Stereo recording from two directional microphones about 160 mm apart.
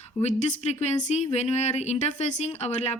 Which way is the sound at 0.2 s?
45° left (ahead or behind).